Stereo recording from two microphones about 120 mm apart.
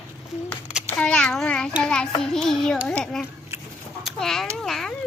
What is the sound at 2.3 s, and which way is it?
Speech, centre (ahead or behind).